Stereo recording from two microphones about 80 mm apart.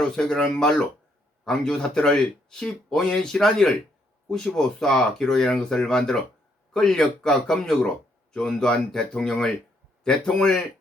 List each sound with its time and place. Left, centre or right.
0.0 s speech: centre